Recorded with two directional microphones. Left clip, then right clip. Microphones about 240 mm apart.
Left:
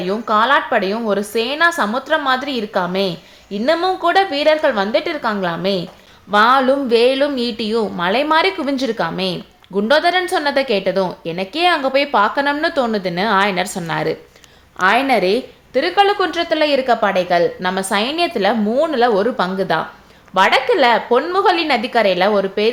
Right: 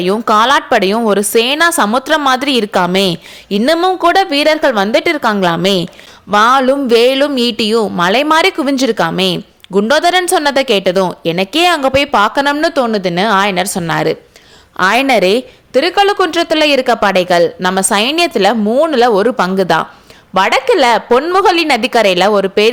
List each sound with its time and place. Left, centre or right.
0.0 s speech: right